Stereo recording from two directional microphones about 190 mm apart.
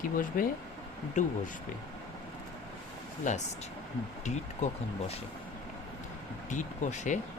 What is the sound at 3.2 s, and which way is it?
Speech, 40° left (ahead or behind).